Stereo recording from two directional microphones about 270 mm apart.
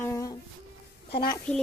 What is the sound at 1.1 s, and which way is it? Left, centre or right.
Speech, left.